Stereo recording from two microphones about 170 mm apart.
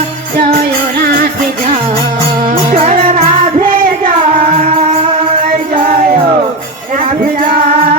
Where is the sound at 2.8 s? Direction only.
40° right (ahead or behind).